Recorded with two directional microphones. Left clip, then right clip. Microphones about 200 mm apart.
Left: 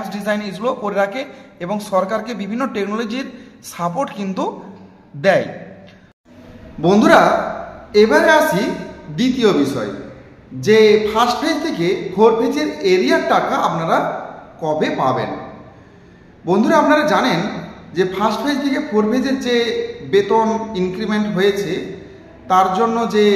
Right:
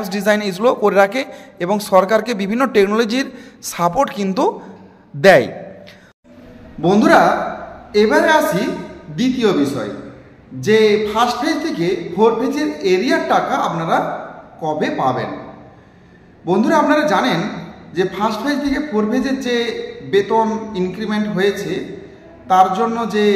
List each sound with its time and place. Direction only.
0.0 s a man's voice: 40° right (ahead or behind)
6.8 s a man's voice: centre (ahead or behind)
16.4 s a man's voice: centre (ahead or behind)